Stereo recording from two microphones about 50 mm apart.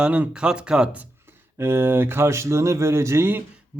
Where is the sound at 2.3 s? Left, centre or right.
Right.